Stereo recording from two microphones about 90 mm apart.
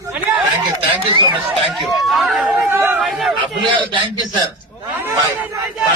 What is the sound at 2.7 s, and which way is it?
Speech, 20° right (ahead or behind).